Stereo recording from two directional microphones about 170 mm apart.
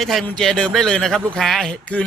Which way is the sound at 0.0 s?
Centre (ahead or behind).